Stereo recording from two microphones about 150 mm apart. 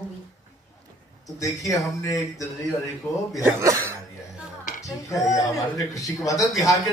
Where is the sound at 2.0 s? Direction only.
20° left (ahead or behind).